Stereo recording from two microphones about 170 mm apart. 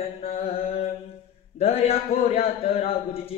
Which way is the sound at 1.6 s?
35° left (ahead or behind).